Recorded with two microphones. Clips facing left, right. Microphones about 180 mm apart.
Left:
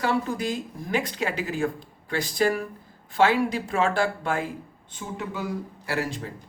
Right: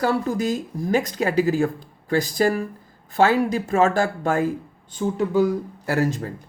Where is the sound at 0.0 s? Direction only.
40° right (ahead or behind).